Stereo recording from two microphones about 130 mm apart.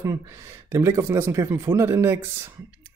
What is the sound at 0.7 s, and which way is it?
Speech, 20° right (ahead or behind).